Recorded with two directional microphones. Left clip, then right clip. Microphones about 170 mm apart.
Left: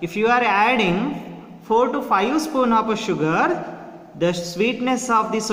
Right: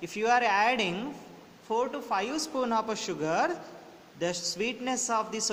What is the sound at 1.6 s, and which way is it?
A man's voice, 30° right (ahead or behind).